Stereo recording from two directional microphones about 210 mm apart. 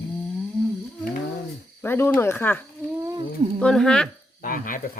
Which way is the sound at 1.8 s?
10° left (ahead or behind).